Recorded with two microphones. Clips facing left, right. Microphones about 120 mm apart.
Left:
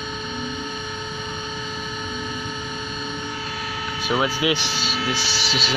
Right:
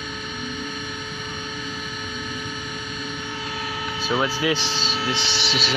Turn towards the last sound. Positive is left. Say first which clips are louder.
# even
turn(degrees=0)  # may be behind; listen again after turning